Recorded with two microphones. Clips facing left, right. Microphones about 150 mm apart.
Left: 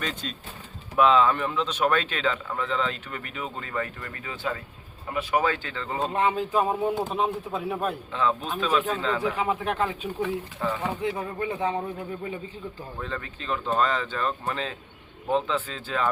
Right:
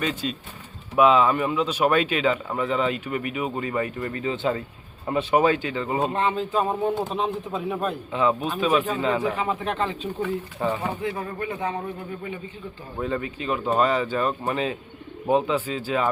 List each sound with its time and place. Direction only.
0.0 s speech: 10° right (ahead or behind)
6.1 s speech: 10° left (ahead or behind)
8.1 s speech: 15° right (ahead or behind)
9.3 s speech: 10° left (ahead or behind)
10.6 s speech: 20° right (ahead or behind)
11.3 s a man's voice: 25° left (ahead or behind)
13.0 s speech: 15° right (ahead or behind)